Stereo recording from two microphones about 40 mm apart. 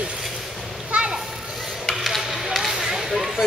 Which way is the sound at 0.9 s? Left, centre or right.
Right.